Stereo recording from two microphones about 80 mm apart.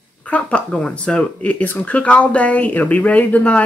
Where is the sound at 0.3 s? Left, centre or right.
Centre.